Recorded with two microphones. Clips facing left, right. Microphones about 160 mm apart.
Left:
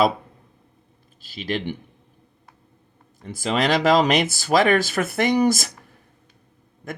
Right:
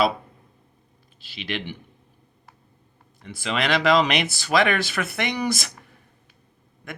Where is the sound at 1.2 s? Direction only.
45° left (ahead or behind).